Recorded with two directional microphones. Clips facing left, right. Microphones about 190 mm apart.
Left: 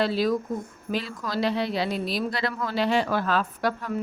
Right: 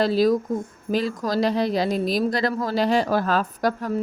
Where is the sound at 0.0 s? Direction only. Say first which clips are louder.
Right 5 dB; 40° right (ahead or behind).